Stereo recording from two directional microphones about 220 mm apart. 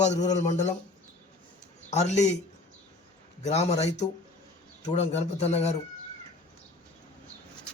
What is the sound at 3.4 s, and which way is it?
A man's voice, 30° left (ahead or behind).